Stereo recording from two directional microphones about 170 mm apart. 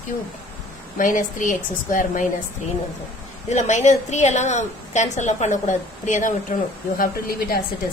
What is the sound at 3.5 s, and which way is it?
A woman's voice, 45° left (ahead or behind).